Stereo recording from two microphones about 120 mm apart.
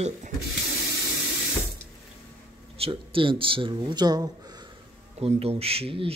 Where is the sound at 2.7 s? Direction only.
50° right (ahead or behind).